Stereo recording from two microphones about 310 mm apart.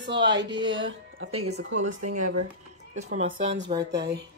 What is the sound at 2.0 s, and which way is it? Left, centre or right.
Speech, right.